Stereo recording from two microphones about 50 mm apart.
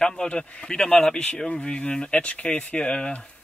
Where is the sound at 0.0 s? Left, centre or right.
Centre.